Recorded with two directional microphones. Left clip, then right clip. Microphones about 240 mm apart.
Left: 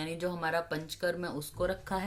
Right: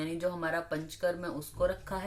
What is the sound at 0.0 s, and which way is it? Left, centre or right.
Speech, left.